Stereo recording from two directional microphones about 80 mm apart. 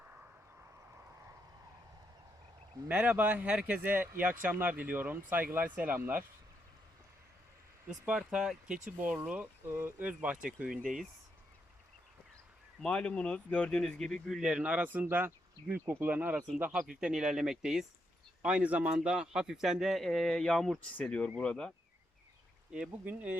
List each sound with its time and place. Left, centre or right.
0.0 s a sound: right
2.9 s speech: centre
3.8 s speech: right
7.9 s speech: centre
9.0 s speech: centre
12.8 s speech: centre; by 16.4 s right
16.7 s speech: centre
18.4 s a man's voice: centre
22.7 s speech: centre